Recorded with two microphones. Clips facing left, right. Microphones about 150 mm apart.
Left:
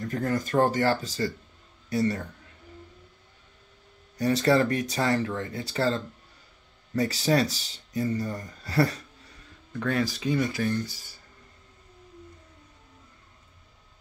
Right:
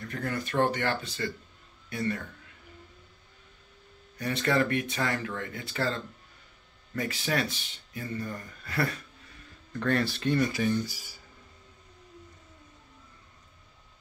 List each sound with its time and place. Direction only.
0.0 s speech: 40° left (ahead or behind)
4.2 s speech: 35° left (ahead or behind)
9.7 s speech: 5° left (ahead or behind); by 11.1 s 10° right (ahead or behind)